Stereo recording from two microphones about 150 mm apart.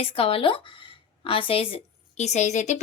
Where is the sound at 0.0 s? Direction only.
40° left (ahead or behind).